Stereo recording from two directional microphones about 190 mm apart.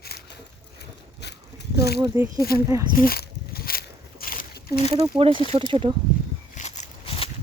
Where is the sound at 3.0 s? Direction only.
50° left (ahead or behind).